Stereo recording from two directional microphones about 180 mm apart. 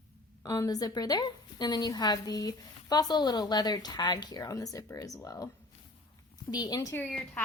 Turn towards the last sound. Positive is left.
turn(degrees=15)  # may be behind; listen again after turning